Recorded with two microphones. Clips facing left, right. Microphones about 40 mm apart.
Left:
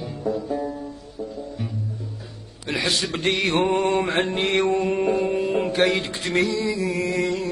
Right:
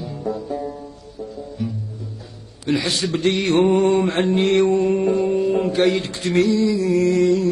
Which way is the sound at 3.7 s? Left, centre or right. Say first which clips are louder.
Right 4 dB; centre.